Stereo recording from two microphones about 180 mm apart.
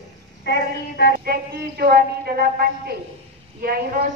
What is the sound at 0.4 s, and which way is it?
Speech, 70° left (ahead or behind).